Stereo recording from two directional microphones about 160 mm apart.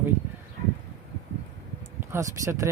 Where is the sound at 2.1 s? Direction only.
20° right (ahead or behind).